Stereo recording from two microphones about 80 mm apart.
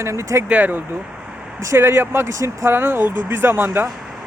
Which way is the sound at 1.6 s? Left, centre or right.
Right.